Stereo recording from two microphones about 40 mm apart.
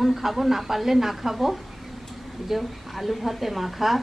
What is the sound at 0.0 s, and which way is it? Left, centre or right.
A woman's voice, centre.